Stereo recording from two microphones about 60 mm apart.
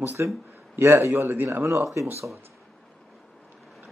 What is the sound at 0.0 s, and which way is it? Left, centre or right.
A man's voice, right.